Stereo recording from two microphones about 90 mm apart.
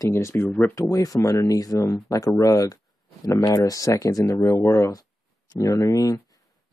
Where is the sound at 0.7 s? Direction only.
40° left (ahead or behind).